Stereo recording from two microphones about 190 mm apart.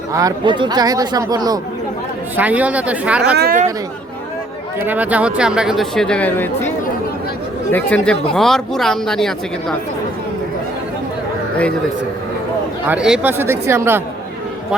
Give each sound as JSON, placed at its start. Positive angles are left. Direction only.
{"t": 0.1, "sound": "speech", "side_deg": -20}
{"t": 2.3, "sound": "speech", "side_deg": -10}
{"t": 3.3, "sound": "speech", "side_deg": -55}
{"t": 4.9, "sound": "speech", "side_deg": -10}
{"t": 12.9, "sound": "speech", "side_deg": -5}